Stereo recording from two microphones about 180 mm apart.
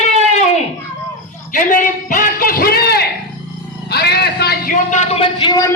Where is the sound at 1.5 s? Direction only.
50° left (ahead or behind).